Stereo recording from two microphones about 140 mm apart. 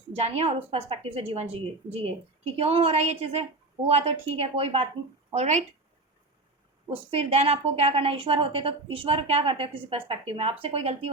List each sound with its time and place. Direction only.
0.1 s speech: 50° right (ahead or behind)
6.9 s a woman's voice: 45° right (ahead or behind)